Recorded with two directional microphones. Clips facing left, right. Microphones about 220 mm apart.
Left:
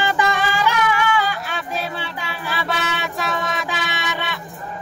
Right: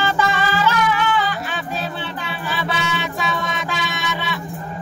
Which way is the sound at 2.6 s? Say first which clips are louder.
Right 1 dB; centre (ahead or behind).